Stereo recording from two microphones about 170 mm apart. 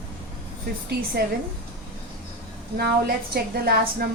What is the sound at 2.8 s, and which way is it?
A woman's voice, 65° right (ahead or behind).